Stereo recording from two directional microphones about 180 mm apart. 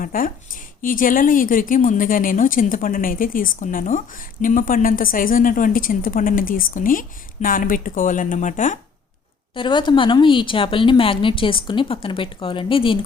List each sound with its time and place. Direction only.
0.0 s speech: 50° left (ahead or behind)
9.6 s speech: 25° left (ahead or behind)